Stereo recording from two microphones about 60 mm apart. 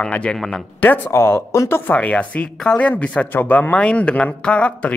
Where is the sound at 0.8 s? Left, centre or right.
Left.